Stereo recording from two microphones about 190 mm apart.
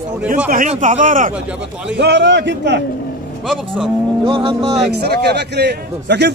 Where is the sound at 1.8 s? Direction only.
65° right (ahead or behind).